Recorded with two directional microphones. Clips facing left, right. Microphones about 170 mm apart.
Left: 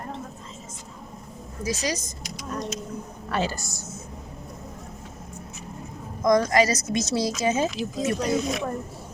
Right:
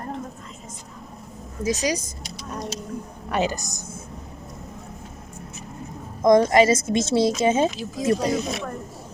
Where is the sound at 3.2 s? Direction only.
15° right (ahead or behind).